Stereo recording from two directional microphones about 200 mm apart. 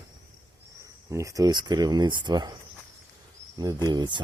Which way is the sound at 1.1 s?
15° right (ahead or behind).